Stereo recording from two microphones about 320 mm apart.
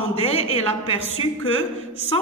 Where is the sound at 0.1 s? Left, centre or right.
Centre.